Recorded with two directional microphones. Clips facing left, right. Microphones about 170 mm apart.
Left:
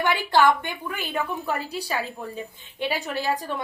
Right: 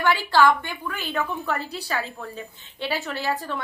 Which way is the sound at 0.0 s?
20° left (ahead or behind).